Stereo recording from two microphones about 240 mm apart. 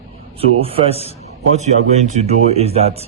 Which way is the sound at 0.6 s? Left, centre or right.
Right.